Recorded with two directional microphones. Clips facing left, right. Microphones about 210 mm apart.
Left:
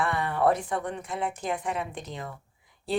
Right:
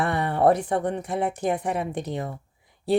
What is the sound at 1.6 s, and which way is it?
Speech, 65° right (ahead or behind).